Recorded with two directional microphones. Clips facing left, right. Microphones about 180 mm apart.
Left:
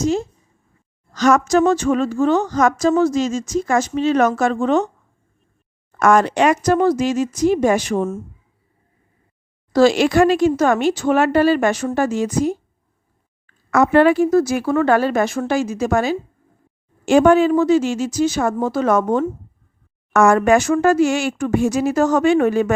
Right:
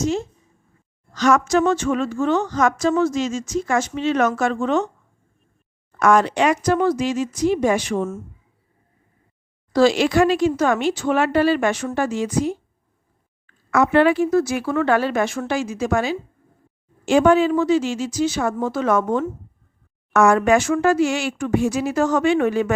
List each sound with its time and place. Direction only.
0.0 s a woman's voice: 35° left (ahead or behind)
6.0 s speech: 45° left (ahead or behind)
9.7 s speech: 45° left (ahead or behind)